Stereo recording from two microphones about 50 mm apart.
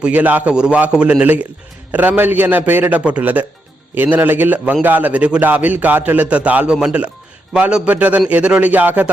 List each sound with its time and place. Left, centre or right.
0.0 s a man's voice: right
0.5 s a man's voice: centre; by 2.9 s right
2.9 s a man's voice: right
6.7 s speech: centre
7.9 s a man's voice: right